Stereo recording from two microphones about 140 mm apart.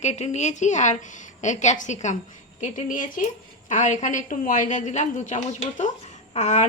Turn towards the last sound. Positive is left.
turn(degrees=55)  # may be behind; listen again after turning